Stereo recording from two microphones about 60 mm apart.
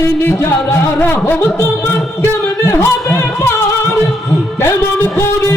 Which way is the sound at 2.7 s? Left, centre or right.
Left.